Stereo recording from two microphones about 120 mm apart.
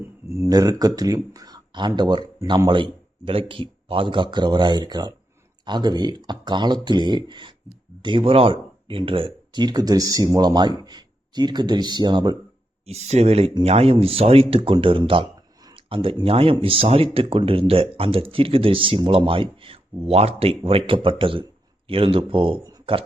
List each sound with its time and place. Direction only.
0.3 s speech: 25° right (ahead or behind)
12.8 s speech: 65° right (ahead or behind); by 23.0 s 50° right (ahead or behind)